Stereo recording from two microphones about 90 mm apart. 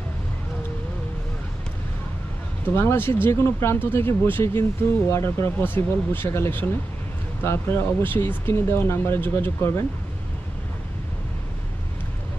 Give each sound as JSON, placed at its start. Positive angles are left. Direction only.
{"t": 2.6, "sound": "speech", "side_deg": 25}